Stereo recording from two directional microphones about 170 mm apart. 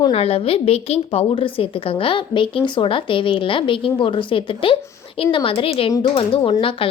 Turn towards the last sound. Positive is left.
turn(degrees=30)  # may be behind; listen again after turning